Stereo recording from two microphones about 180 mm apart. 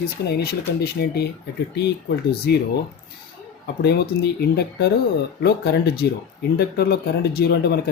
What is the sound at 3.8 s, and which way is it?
Speech, 65° left (ahead or behind).